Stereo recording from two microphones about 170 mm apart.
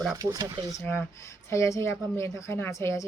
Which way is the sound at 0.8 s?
15° left (ahead or behind).